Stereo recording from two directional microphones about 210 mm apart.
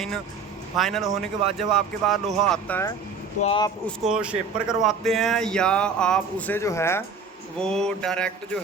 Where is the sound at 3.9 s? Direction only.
5° right (ahead or behind).